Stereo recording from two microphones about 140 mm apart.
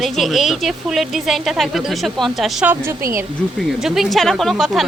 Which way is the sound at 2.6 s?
20° right (ahead or behind).